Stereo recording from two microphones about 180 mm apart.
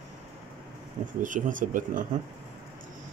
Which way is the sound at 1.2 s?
45° right (ahead or behind).